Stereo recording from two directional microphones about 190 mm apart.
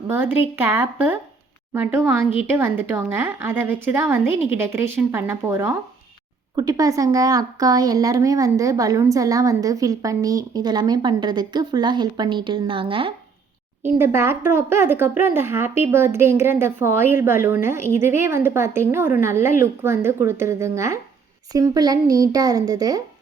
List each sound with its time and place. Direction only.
0.1 s speech: 10° right (ahead or behind); by 13.1 s 25° right (ahead or behind)
13.8 s speech: 10° right (ahead or behind)